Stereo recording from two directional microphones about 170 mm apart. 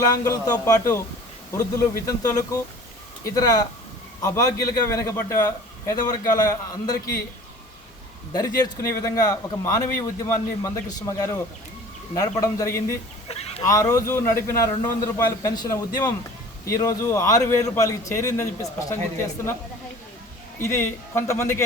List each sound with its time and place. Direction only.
0.0 s a man's voice: 20° left (ahead or behind)
8.3 s a man's voice: 25° left (ahead or behind)
13.2 s a sound: 35° left (ahead or behind)
13.7 s a man's voice: 20° left (ahead or behind)
20.6 s a man's voice: 15° left (ahead or behind)